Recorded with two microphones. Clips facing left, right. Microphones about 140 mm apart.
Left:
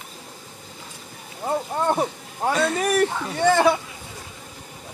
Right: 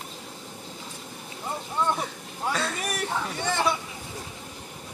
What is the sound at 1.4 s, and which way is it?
Speech, 50° left (ahead or behind).